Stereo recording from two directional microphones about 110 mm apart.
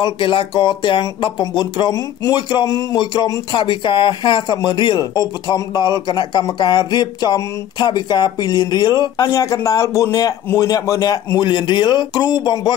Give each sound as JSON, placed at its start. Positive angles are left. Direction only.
{"t": 0.0, "sound": "speech", "side_deg": 50}